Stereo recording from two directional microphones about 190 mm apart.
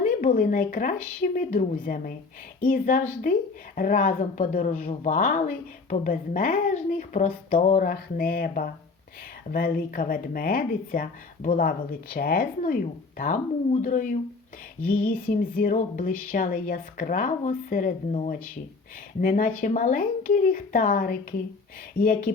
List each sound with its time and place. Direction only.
0.0 s speech: 40° left (ahead or behind)